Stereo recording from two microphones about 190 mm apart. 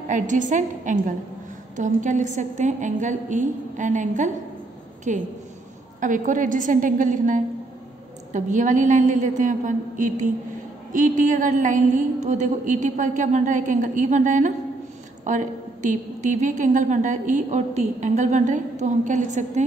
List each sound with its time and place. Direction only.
0.1 s a woman's voice: 40° right (ahead or behind)